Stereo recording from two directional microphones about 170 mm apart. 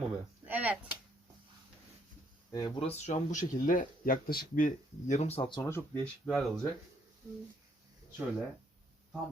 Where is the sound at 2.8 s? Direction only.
40° left (ahead or behind).